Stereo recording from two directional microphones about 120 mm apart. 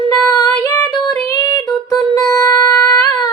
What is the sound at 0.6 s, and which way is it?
Female singing, 30° left (ahead or behind).